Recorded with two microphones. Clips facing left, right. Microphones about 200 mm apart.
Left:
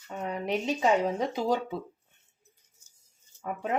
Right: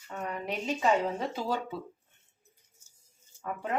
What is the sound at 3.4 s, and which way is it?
Speech, 20° left (ahead or behind).